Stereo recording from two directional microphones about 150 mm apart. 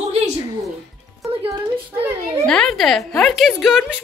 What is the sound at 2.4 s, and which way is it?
A woman's voice, 5° left (ahead or behind).